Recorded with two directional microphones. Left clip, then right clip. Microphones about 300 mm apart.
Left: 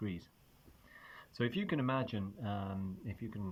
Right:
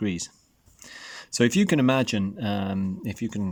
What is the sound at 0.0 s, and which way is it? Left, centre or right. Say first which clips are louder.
Speech: right 15 dB; right.